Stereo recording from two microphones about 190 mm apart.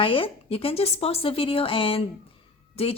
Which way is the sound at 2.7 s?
30° left (ahead or behind).